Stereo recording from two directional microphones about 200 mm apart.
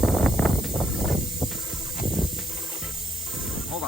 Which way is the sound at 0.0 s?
Centre (ahead or behind).